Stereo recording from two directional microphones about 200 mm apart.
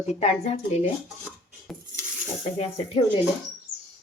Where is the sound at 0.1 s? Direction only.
35° left (ahead or behind).